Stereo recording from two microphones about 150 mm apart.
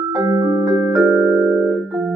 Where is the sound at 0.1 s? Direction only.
25° right (ahead or behind).